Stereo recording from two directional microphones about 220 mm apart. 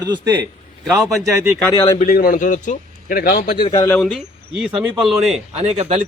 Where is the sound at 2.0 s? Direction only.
40° left (ahead or behind).